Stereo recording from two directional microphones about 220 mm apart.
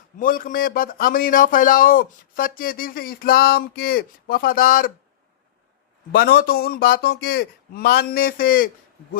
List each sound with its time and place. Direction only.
0.2 s speech: 40° left (ahead or behind)
6.1 s a man's voice: 45° left (ahead or behind)